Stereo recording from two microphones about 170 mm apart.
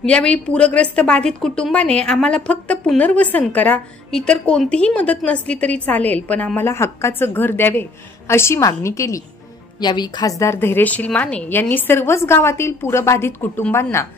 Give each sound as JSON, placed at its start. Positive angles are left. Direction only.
{"t": 0.0, "sound": "a woman's voice", "side_deg": 5}